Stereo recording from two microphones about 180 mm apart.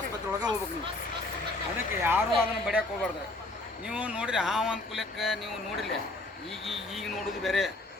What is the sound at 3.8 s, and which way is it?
Speech, 5° right (ahead or behind).